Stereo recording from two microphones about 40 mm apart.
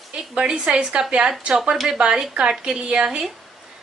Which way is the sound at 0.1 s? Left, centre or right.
Right.